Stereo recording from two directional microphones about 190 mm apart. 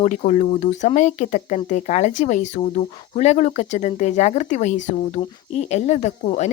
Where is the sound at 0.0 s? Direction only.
40° left (ahead or behind).